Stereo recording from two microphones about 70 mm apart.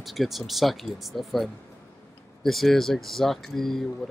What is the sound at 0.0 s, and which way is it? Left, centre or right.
Speech, centre.